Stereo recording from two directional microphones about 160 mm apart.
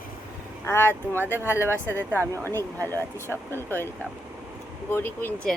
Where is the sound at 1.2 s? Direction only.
15° right (ahead or behind).